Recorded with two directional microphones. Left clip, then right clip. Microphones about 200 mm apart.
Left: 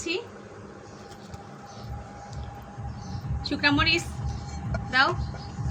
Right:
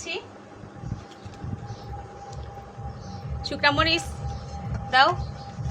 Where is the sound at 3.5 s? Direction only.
45° right (ahead or behind).